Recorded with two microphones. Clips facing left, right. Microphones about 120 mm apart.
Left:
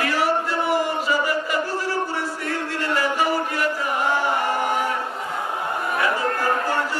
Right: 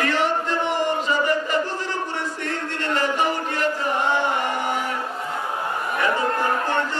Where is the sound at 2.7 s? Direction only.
10° left (ahead or behind).